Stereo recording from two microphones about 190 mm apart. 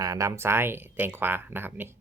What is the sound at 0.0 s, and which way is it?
Speech, 15° right (ahead or behind).